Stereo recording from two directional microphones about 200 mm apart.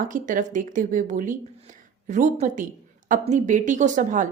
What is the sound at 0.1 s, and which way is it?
A woman's voice, 40° right (ahead or behind).